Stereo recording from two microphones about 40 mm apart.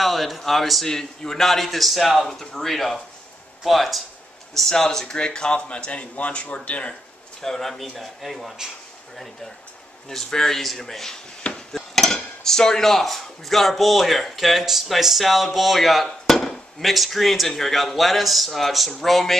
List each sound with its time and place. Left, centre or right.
0.0 s a man's voice: centre
0.8 s speech: centre
2.2 s a man's voice: centre
2.5 s a man's voice: centre; by 7.0 s left
7.4 s a man's voice: centre